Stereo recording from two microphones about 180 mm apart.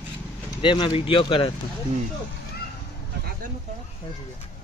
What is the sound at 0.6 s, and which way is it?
Speech, 25° left (ahead or behind).